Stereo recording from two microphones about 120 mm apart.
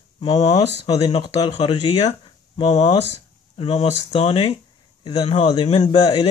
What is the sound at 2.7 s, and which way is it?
Speech, 65° left (ahead or behind).